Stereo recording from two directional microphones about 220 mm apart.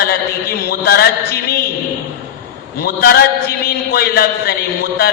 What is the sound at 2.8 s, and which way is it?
A man's voice, 45° left (ahead or behind).